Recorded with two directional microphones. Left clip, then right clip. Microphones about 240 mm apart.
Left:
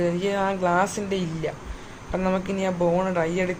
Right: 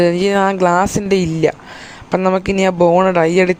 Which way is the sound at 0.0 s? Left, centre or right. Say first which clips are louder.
Right 11 dB; right.